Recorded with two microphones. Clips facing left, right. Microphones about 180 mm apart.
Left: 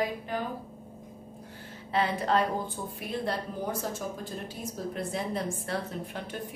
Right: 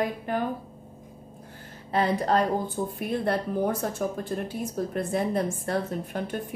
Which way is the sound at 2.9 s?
55° right (ahead or behind).